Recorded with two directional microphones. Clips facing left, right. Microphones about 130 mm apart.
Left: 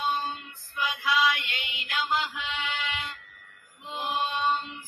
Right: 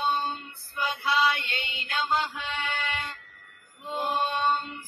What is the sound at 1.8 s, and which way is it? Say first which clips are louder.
Music: right 1 dB; 30° right (ahead or behind).